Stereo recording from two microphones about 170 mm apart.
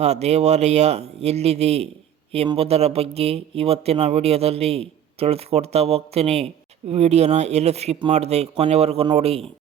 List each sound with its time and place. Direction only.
0.0 s speech: 40° right (ahead or behind)